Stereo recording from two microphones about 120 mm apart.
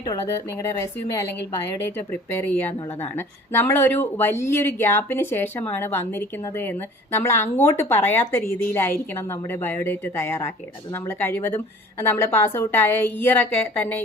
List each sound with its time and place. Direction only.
0.5 s a woman's voice: 20° left (ahead or behind)
2.0 s a woman's voice: 15° left (ahead or behind)